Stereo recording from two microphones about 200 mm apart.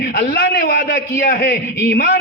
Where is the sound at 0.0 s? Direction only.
45° left (ahead or behind).